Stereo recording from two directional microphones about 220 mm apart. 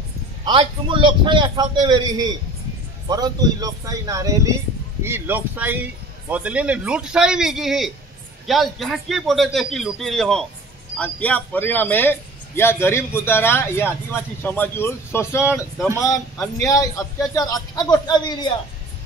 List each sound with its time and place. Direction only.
0.5 s a man's voice: 20° right (ahead or behind); by 15.4 s 10° left (ahead or behind)
15.4 s a man's voice: 5° right (ahead or behind)
16.6 s speech: 15° left (ahead or behind)